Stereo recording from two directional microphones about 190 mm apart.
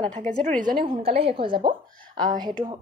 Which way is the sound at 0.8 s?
30° right (ahead or behind).